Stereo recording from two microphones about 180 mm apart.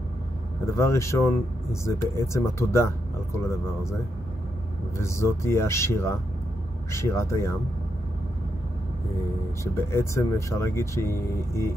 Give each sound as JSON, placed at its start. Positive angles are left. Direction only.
{"t": 0.7, "sound": "speech", "side_deg": 15}
{"t": 4.9, "sound": "speech", "side_deg": 15}
{"t": 9.8, "sound": "speech", "side_deg": 15}